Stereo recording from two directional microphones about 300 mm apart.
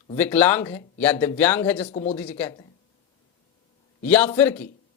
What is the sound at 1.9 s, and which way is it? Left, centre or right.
Speech, centre.